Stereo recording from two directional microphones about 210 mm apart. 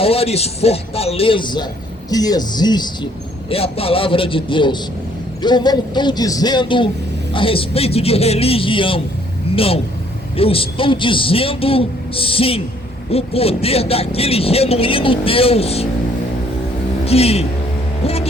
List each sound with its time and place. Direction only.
0.0 s a man's voice: 30° left (ahead or behind)
17.1 s a man's voice: 30° left (ahead or behind)
18.0 s hum: 30° left (ahead or behind)